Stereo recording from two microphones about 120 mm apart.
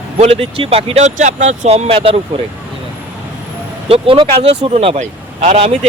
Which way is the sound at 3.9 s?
50° right (ahead or behind).